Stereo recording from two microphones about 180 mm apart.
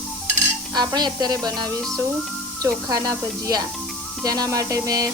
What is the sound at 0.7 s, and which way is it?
Speech, 20° right (ahead or behind).